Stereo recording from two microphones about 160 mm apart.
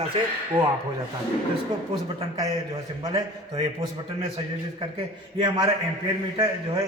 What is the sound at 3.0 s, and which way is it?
Speech, 20° right (ahead or behind).